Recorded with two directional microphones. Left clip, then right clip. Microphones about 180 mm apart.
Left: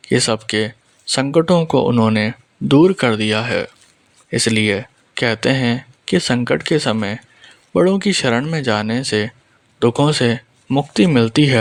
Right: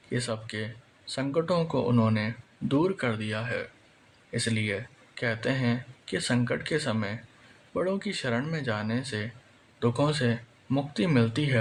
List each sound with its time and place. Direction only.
0.1 s speech: 50° left (ahead or behind)